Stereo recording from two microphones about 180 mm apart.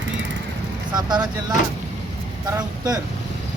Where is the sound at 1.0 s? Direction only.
25° right (ahead or behind).